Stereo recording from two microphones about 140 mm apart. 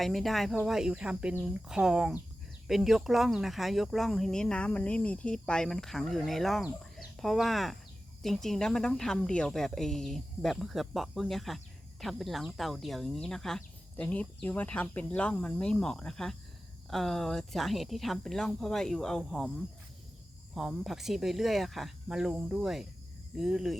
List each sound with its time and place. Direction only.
0.0 s speech: centre (ahead or behind)
20.6 s speech: centre (ahead or behind)